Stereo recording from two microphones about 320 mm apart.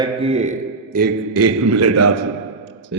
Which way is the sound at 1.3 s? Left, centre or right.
Right.